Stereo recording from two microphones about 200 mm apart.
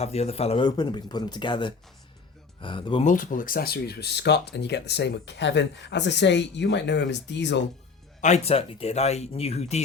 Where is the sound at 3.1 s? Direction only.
40° left (ahead or behind); by 7.6 s 60° left (ahead or behind).